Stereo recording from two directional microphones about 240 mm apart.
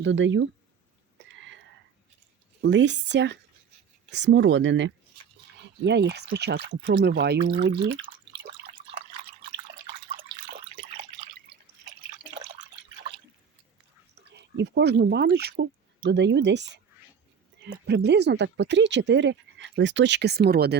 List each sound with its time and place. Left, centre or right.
0.0 s speech: right
1.4 s a sound: right
2.6 s speech: right
14.2 s speech: right